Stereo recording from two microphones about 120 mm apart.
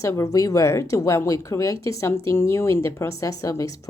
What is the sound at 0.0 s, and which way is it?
A woman's voice, 25° left (ahead or behind).